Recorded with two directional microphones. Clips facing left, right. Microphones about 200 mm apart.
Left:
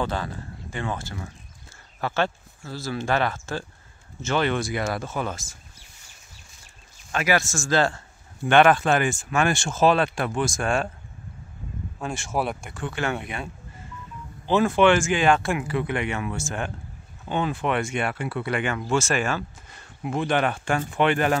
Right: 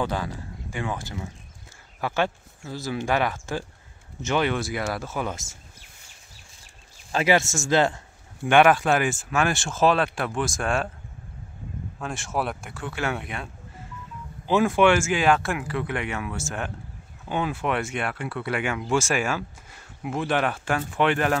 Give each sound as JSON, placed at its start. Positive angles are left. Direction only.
{"t": 0.0, "sound": "speech", "side_deg": -10}
{"t": 7.1, "sound": "speech", "side_deg": -30}
{"t": 12.0, "sound": "speech", "side_deg": 0}
{"t": 14.5, "sound": "speech", "side_deg": -10}